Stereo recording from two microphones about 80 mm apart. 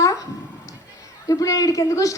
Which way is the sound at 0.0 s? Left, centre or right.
Left.